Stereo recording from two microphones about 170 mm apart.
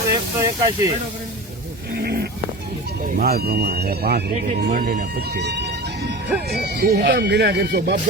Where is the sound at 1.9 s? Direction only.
70° right (ahead or behind).